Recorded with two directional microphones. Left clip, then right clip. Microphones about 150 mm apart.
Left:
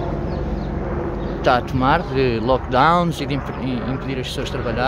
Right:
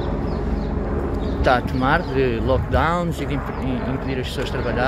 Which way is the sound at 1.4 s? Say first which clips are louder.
Left 1 dB; 20° left (ahead or behind).